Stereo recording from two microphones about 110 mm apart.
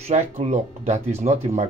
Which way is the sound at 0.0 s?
90° right.